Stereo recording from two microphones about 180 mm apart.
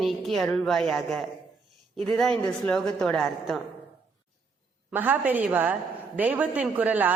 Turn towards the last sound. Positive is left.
turn(degrees=-10)  # may be behind; listen again after turning